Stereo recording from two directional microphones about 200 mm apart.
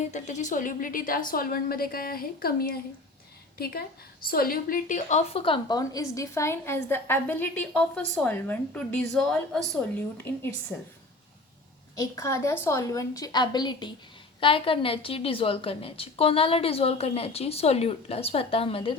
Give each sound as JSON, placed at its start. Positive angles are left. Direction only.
{"t": 0.1, "sound": "a woman's voice", "side_deg": 35}
{"t": 10.7, "sound": "a woman's voice", "side_deg": 5}
{"t": 11.9, "sound": "a woman's voice", "side_deg": 15}